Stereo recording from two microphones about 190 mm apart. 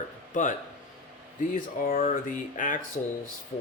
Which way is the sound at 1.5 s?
45° left (ahead or behind).